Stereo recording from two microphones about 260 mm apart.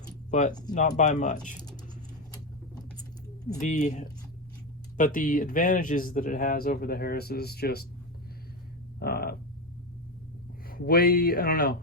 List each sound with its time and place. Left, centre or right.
0.3 s speech: left
3.5 s speech: left
9.0 s a sound: left
10.7 s speech: left